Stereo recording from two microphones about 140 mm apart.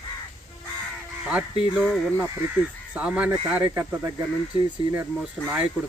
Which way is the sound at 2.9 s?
10° right (ahead or behind).